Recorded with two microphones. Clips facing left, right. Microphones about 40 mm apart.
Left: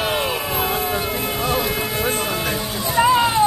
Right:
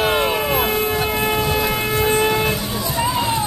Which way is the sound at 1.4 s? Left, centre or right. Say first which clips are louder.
Right 1 dB; centre.